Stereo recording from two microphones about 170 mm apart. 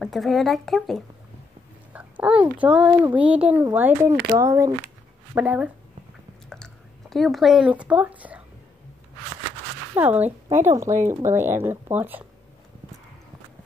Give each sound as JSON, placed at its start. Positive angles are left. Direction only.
{"t": 0.0, "sound": "a child's voice", "side_deg": 0}
{"t": 5.3, "sound": "speech", "side_deg": -10}
{"t": 6.5, "sound": "speech", "side_deg": 0}
{"t": 9.9, "sound": "speech", "side_deg": -10}